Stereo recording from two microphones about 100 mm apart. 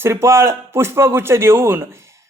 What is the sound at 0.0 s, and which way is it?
Speech, 25° right (ahead or behind).